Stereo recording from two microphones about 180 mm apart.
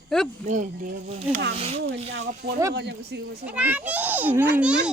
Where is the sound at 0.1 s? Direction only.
5° left (ahead or behind).